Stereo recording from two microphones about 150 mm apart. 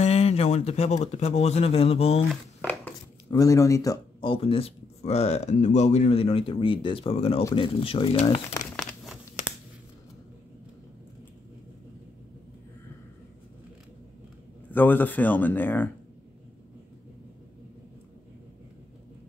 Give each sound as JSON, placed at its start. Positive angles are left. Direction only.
{"t": 0.0, "sound": "speech", "side_deg": 45}
{"t": 2.6, "sound": "a sound", "side_deg": 10}
{"t": 3.3, "sound": "speech", "side_deg": 25}
{"t": 4.2, "sound": "speech", "side_deg": 35}
{"t": 8.7, "sound": "crumpling", "side_deg": 0}
{"t": 14.7, "sound": "speech", "side_deg": 15}